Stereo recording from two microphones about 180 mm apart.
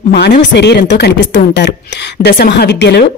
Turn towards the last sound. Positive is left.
turn(degrees=70)  # may be behind; listen again after turning